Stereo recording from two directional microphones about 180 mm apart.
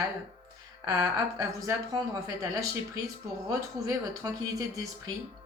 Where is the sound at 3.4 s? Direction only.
20° right (ahead or behind).